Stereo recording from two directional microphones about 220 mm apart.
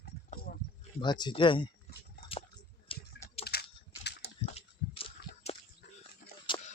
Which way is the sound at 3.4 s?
45° left (ahead or behind).